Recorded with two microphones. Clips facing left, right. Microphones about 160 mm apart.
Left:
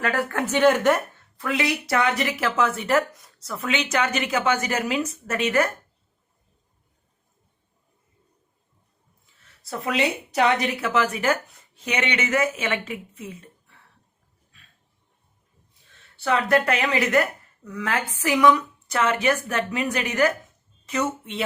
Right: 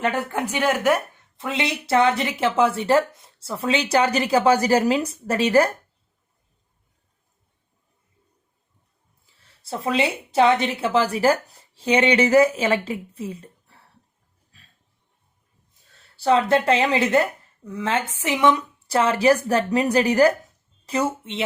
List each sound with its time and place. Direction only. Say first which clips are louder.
0.0 s a woman's voice: right 1 dB; 20° right (ahead or behind)
1.4 s speech: left 1 dB; 25° right (ahead or behind)
9.2 s speech: even; 30° right (ahead or behind)
14.5 s a sound: right 2 dB; 35° right (ahead or behind)
15.9 s speech: right 5 dB; 35° right (ahead or behind)